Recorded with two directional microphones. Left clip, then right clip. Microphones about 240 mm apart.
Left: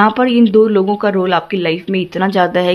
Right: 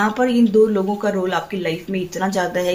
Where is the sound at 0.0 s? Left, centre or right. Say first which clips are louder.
Left 6 dB; left.